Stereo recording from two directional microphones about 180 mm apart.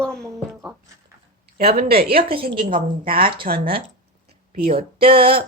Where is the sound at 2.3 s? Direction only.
30° right (ahead or behind).